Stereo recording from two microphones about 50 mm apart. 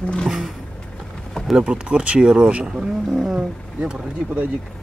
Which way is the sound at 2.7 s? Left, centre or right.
Centre.